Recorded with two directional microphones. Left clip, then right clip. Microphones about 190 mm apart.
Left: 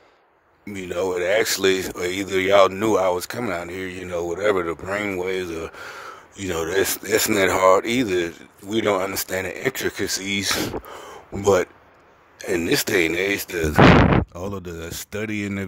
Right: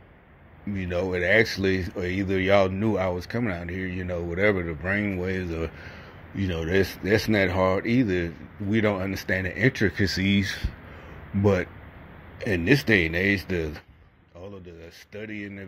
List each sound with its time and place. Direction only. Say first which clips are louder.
0.7 s speech: left 3 dB; 30° left (ahead or behind)
11.4 s speech: left 6 dB; 35° left (ahead or behind)